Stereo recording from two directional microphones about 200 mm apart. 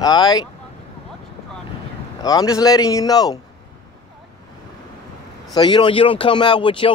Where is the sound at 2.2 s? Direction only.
20° left (ahead or behind).